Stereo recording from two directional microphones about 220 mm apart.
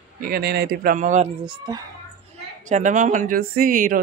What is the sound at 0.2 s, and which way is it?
Speech, 45° right (ahead or behind).